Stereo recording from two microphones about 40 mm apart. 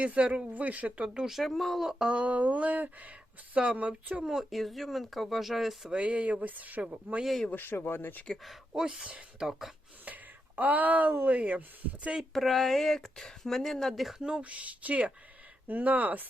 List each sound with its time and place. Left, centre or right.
0.0 s speech: right
1.3 s speech: centre
1.9 s speech: centre
2.1 s speech: right
4.4 s speech: centre
5.9 s speech: right
7.5 s speech: left
8.7 s speech: centre
10.1 s a sound: right
11.3 s speech: right
12.3 s speech: centre
14.2 s speech: right
14.4 s speech: right